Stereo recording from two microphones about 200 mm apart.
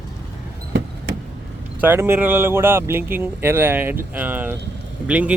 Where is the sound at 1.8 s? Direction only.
10° right (ahead or behind).